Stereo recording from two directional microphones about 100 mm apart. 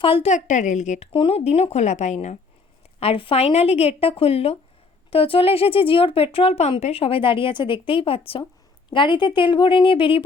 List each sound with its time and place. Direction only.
0.0 s a woman's voice: 65° left (ahead or behind); by 2.4 s 90° left
3.0 s speech: 65° left (ahead or behind)
5.1 s speech: 70° left (ahead or behind)
8.9 s a woman's voice: 55° left (ahead or behind)